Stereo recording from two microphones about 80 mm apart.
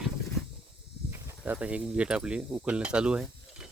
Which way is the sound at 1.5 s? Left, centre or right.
Centre.